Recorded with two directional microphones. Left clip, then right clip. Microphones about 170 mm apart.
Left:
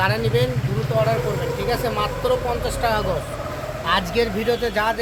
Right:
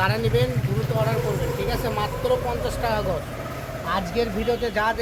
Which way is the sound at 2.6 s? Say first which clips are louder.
Left 3 dB; centre (ahead or behind).